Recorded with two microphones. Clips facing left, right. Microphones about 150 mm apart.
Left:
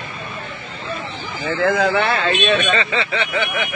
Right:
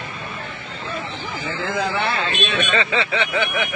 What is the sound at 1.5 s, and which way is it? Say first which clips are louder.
Speech: left 7 dB; 70° left (ahead or behind).